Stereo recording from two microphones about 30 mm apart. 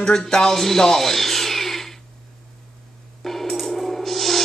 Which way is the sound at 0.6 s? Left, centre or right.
Centre.